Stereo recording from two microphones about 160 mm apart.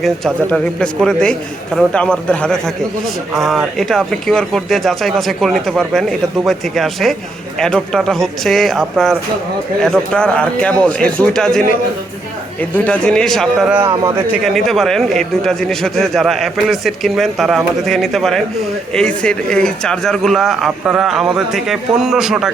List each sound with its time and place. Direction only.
0.0 s a man's voice: centre (ahead or behind)
12.7 s speech: 10° left (ahead or behind)
13.7 s a man's voice: 15° right (ahead or behind)
14.4 s speech: centre (ahead or behind)